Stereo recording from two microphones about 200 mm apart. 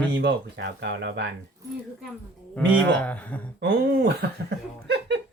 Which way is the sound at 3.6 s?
55° right (ahead or behind).